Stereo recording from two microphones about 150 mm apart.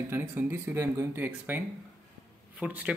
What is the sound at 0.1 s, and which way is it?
Speech, 15° right (ahead or behind).